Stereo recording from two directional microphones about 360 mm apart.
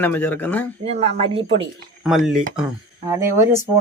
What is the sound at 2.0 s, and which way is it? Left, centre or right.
Speech, centre.